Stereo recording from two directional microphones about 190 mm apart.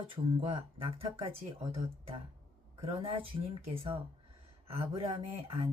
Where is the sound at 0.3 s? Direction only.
30° right (ahead or behind).